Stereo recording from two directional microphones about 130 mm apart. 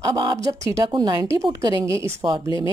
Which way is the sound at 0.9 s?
35° right (ahead or behind).